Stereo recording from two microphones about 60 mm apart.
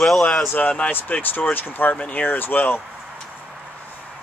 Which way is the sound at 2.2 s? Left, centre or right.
Left.